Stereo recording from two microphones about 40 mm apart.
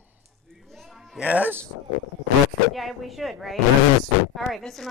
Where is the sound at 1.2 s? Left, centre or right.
Right.